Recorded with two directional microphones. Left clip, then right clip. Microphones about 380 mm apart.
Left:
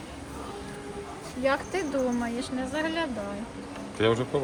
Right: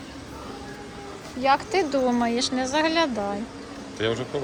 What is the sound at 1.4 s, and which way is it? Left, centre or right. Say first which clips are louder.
Speech: right 6 dB; centre.